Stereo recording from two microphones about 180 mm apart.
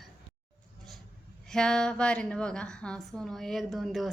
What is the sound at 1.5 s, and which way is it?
A woman's voice, 5° left (ahead or behind).